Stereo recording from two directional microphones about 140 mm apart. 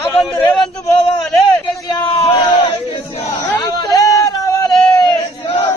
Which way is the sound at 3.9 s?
25° left (ahead or behind).